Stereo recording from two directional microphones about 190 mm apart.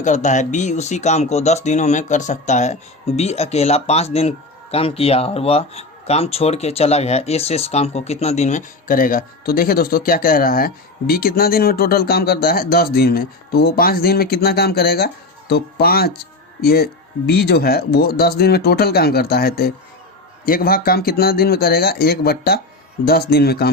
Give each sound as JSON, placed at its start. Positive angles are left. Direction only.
{"t": 0.0, "sound": "speech", "side_deg": 40}